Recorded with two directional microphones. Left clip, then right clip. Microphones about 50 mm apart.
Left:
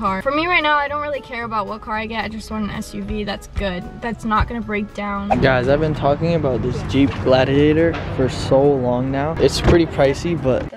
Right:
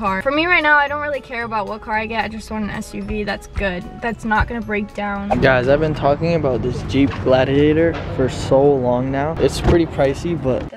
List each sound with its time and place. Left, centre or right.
0.0 s speech: right
5.0 s speech: centre
7.2 s speech: centre
8.6 s speech: centre
9.4 s speech: left